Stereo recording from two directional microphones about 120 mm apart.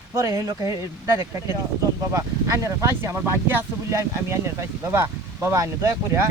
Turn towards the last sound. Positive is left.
turn(degrees=-25)  # may be behind; listen again after turning